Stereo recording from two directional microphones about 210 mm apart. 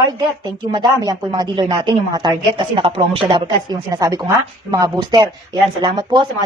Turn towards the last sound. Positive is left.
turn(degrees=-20)  # may be behind; listen again after turning